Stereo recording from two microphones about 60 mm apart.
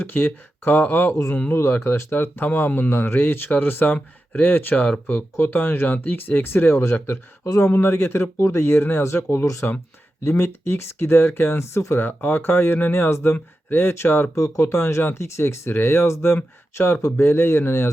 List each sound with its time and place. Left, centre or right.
0.0 s speech: left
7.4 s speech: left
7.7 s speech: left
12.0 s speech: left
14.4 s speech: left